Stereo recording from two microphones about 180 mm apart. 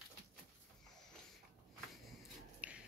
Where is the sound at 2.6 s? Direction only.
5° right (ahead or behind).